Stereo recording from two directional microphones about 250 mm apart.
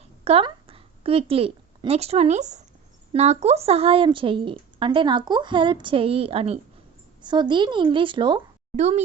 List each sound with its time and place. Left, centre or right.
0.3 s a woman's voice: right